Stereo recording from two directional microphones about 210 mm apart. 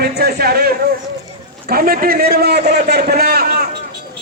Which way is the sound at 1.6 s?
45° right (ahead or behind).